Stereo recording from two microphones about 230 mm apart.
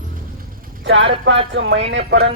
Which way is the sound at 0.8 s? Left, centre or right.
Right.